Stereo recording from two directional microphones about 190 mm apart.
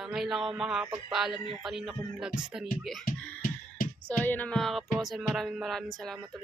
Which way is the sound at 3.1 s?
45° left (ahead or behind).